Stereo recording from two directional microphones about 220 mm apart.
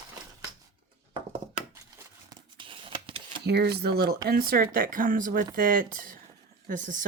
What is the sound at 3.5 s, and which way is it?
Speech, 45° right (ahead or behind).